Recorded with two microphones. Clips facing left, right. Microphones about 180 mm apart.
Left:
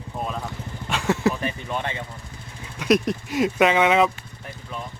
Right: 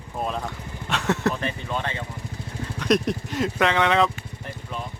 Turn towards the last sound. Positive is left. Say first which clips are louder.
# left 3 dB
turn(degrees=10)  # may be behind; listen again after turning